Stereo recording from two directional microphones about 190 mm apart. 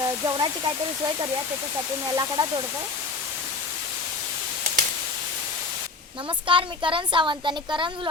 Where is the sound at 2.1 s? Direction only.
20° right (ahead or behind).